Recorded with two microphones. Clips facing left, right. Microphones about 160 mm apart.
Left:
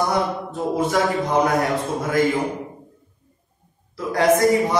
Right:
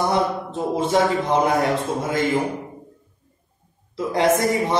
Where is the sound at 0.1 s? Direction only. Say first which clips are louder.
Right 1 dB; 25° right (ahead or behind).